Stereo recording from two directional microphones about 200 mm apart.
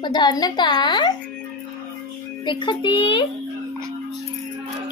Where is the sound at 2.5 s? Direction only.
25° left (ahead or behind).